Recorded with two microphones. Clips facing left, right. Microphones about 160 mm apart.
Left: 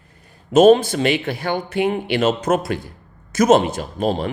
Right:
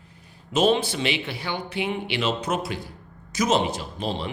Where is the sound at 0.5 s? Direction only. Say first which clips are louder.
Left 9 dB; 45° left (ahead or behind).